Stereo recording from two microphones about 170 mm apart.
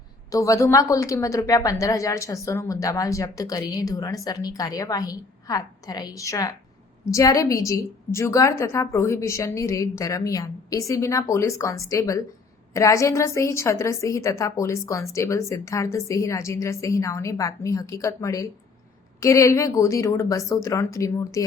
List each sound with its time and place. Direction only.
0.3 s a woman's voice: 20° left (ahead or behind)